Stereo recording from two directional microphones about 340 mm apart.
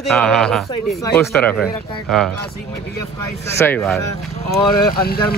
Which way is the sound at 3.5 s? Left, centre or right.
Centre.